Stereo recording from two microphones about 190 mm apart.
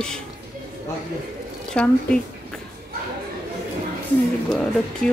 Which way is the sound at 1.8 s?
5° left (ahead or behind).